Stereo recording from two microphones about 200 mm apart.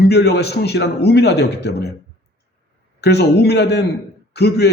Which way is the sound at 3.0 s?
55° left (ahead or behind).